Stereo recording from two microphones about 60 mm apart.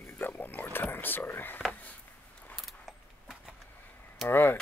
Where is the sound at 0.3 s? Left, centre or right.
Left.